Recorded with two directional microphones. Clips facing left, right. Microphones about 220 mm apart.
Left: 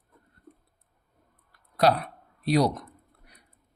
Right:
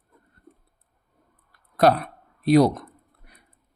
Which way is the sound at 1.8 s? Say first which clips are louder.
Right 4 dB; 50° right (ahead or behind).